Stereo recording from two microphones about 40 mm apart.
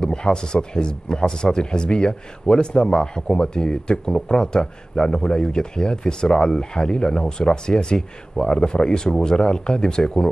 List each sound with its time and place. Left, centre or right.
0.0 s speech: left